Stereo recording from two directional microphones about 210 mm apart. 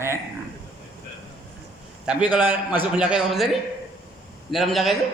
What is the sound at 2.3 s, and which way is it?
A man's voice, 10° right (ahead or behind).